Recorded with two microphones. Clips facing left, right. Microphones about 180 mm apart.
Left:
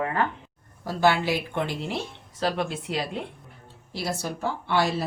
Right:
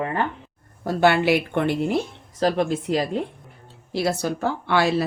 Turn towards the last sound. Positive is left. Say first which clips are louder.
# right 4 dB
turn(degrees=-75)  # may be behind; listen again after turning